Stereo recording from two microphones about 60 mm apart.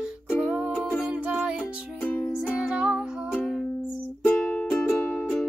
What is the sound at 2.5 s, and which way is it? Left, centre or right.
Music, centre.